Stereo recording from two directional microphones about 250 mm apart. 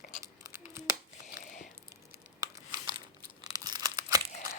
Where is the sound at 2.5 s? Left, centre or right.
Centre.